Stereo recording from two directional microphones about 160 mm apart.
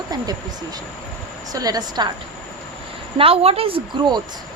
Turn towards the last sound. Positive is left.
turn(degrees=-30)  # may be behind; listen again after turning